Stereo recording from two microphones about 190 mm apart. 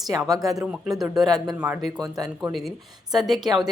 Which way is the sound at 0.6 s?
5° right (ahead or behind).